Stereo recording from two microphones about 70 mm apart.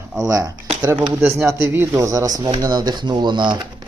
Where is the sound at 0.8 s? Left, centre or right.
Right.